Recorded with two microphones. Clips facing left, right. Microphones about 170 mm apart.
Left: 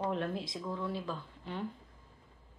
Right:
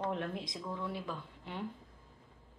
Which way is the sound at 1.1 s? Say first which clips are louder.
Left 2 dB; 25° right (ahead or behind).